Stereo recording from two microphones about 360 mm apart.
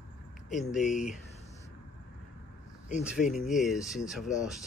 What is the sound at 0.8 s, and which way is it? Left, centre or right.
Speech, left.